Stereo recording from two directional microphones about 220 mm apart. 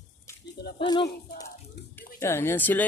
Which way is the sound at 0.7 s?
20° left (ahead or behind).